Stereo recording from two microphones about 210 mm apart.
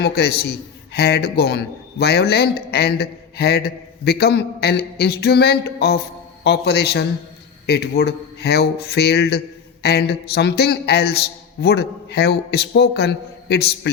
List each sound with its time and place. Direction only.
0.0 s a man's voice: 50° left (ahead or behind)